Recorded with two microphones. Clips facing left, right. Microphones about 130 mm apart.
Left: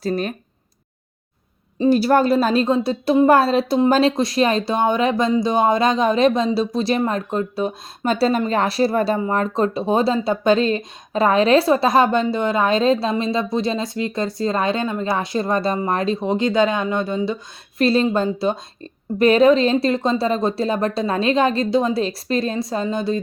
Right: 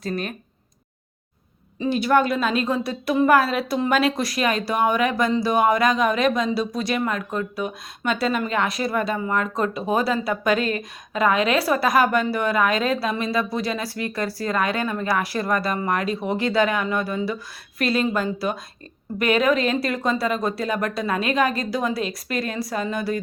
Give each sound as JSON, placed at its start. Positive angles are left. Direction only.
{"t": 0.0, "sound": "speech", "side_deg": 35}
{"t": 1.8, "sound": "a woman's voice", "side_deg": 35}